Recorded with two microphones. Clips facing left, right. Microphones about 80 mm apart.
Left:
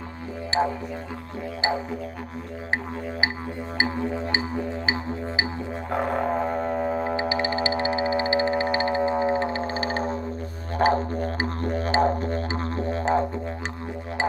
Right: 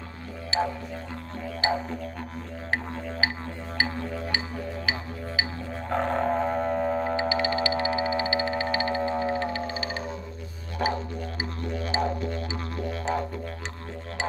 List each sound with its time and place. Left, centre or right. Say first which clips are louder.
0.5 s music: left 3 dB; left
3.7 s music: left 4 dB; centre
5.9 s didgeridoo: even; centre
7.2 s music: left 1 dB; left